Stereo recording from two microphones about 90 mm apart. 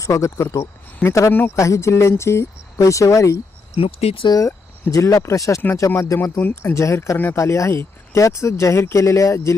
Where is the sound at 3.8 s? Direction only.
90° left.